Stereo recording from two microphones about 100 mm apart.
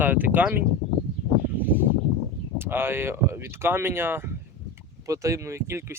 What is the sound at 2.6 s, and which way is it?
Speech, 20° right (ahead or behind).